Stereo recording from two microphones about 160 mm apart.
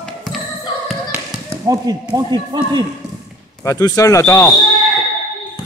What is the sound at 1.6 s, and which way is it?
A man's voice, 20° right (ahead or behind).